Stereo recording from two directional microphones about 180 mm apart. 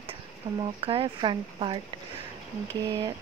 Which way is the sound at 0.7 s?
30° right (ahead or behind).